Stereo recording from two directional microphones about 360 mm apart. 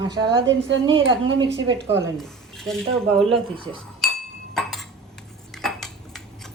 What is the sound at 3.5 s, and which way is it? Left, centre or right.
Speech, centre.